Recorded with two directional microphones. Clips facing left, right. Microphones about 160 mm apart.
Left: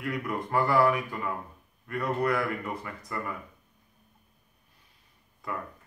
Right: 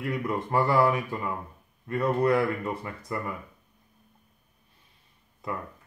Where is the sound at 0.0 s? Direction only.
25° right (ahead or behind).